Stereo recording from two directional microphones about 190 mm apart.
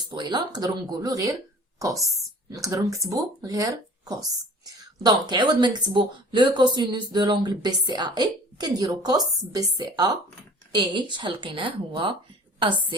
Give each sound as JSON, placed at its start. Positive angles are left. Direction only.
{"t": 0.1, "sound": "a woman's voice", "side_deg": -25}